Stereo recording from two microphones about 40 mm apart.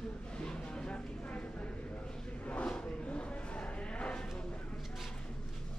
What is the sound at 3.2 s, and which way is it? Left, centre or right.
Vehicle, left.